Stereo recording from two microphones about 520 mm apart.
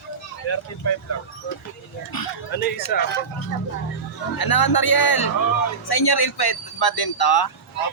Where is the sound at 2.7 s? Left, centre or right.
Centre.